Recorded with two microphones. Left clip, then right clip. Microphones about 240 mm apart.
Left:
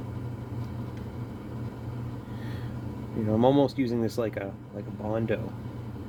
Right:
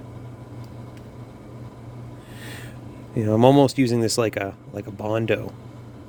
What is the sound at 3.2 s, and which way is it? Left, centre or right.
Speech, right.